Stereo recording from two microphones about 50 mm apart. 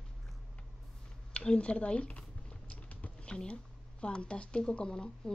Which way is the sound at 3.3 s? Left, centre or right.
Centre.